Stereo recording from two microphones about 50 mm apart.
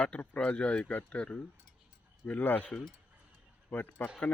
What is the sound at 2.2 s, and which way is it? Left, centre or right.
Speech, left.